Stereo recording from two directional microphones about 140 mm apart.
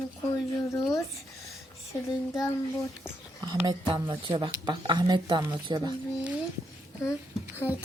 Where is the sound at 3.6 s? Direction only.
35° right (ahead or behind).